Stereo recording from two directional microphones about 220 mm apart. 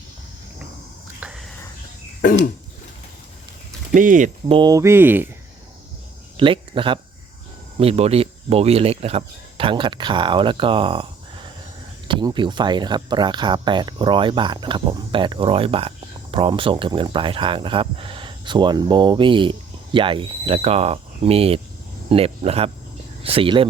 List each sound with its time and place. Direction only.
1.2 s whispering: centre (ahead or behind)
2.2 s a sound: 40° left (ahead or behind)
3.9 s speech: 35° right (ahead or behind)
4.4 s speech: 20° right (ahead or behind)
6.3 s speech: 25° right (ahead or behind)